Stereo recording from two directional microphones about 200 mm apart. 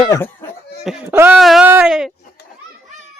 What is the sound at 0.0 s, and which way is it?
Laughter, 15° left (ahead or behind).